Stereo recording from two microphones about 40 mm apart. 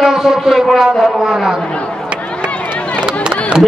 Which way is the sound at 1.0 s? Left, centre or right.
Centre.